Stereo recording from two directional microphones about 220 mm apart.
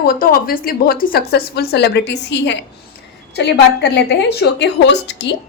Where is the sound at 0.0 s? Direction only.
40° left (ahead or behind).